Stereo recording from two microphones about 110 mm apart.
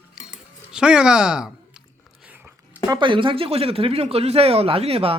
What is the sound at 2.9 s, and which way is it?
Speech, 45° right (ahead or behind).